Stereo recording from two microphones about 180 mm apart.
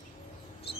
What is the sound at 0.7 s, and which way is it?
Mouse, 35° left (ahead or behind).